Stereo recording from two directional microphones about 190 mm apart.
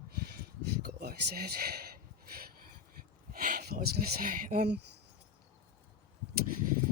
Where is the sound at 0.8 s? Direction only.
55° right (ahead or behind).